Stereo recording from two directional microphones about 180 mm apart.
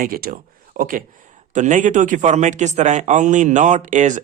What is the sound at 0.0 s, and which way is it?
Speech, 55° right (ahead or behind).